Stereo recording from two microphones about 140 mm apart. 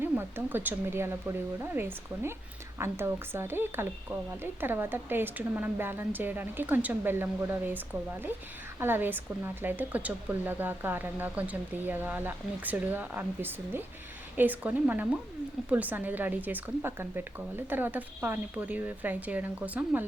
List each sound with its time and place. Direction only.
0.0 s speech: 15° right (ahead or behind)